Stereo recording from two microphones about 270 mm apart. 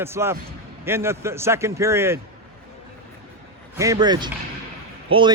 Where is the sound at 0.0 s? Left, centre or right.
Centre.